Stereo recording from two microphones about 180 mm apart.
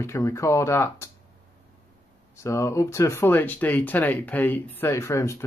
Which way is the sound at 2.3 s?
15° left (ahead or behind).